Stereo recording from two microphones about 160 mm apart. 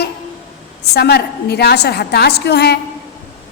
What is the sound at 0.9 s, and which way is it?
A woman's voice, 90° left.